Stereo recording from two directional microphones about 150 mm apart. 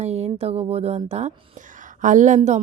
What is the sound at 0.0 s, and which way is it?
Speech, 45° right (ahead or behind).